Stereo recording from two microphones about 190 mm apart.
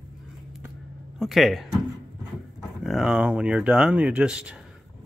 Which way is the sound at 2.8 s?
Centre (ahead or behind).